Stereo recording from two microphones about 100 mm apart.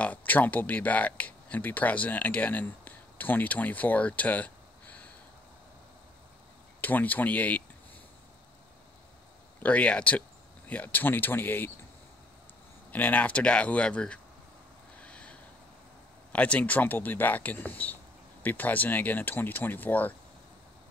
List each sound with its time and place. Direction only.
0.0 s speech: 15° left (ahead or behind)
6.8 s speech: 15° left (ahead or behind)
9.6 s speech: 15° left (ahead or behind)
12.9 s speech: 15° left (ahead or behind)
15.0 s a sound: 10° left (ahead or behind)
16.3 s speech: 10° left (ahead or behind)